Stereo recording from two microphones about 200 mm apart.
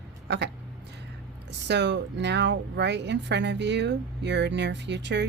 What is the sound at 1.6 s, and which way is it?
Speech, 60° right (ahead or behind).